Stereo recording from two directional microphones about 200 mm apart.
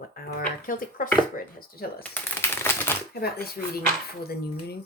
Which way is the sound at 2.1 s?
10° left (ahead or behind).